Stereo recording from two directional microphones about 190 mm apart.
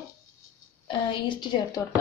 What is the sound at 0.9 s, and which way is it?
Speech, 25° left (ahead or behind).